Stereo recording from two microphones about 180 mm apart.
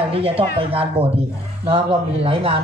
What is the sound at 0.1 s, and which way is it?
A man's voice, 30° right (ahead or behind).